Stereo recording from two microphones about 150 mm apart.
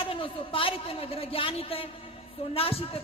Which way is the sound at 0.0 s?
35° left (ahead or behind).